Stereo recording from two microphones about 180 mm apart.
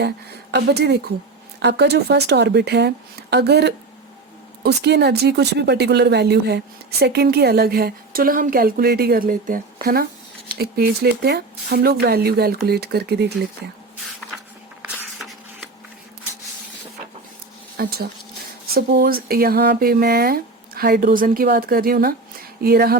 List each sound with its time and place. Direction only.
0.5 s speech: 65° right (ahead or behind)
14.8 s a sound: centre (ahead or behind)
17.7 s speech: 60° right (ahead or behind)